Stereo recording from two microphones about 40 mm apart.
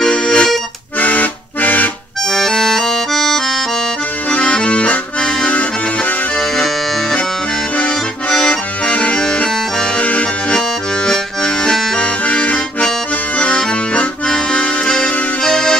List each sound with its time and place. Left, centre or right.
0.0 s accordion: left
0.9 s accordion: left
2.2 s accordion: centre
4.3 s accordion: left
6.5 s music: centre
7.7 s accordion: left
11.1 s accordion: centre
12.0 s accordion: left
13.9 s accordion: left
15.4 s music: centre